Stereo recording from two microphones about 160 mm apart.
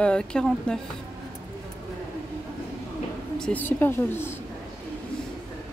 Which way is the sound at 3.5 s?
10° left (ahead or behind).